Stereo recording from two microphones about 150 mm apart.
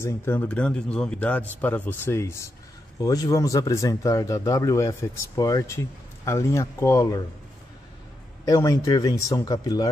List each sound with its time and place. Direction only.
0.0 s a man's voice: 15° left (ahead or behind)
8.5 s speech: 25° left (ahead or behind)